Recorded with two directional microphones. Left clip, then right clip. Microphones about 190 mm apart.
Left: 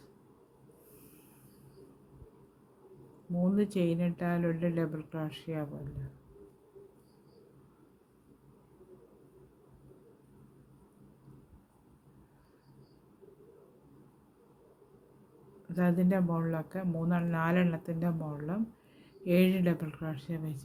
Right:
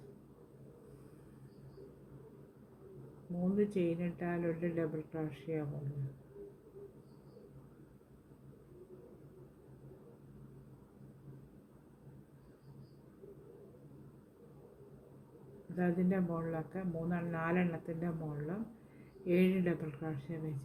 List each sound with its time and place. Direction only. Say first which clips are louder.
3.5 s speech: left 1 dB; 65° left (ahead or behind)
15.7 s speech: left 5 dB; 65° left (ahead or behind)